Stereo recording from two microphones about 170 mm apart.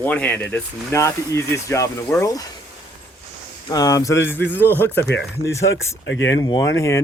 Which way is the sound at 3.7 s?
20° left (ahead or behind).